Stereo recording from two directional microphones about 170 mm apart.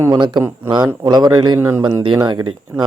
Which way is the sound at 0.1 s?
25° right (ahead or behind).